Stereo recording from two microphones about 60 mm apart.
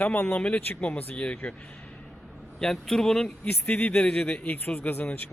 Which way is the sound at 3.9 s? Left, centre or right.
Centre.